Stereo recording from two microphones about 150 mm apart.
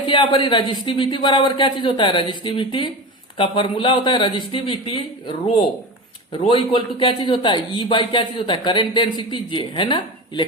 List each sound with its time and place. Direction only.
0.1 s a man's voice: 30° left (ahead or behind)